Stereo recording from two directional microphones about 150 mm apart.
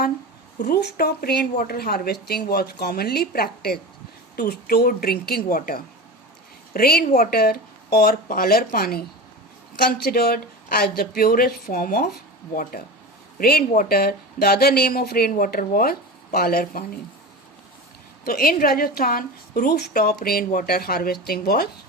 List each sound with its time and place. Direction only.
0.6 s speech: 90° left; by 5.8 s 70° left (ahead or behind)
6.7 s speech: 80° left
18.3 s speech: 75° left (ahead or behind)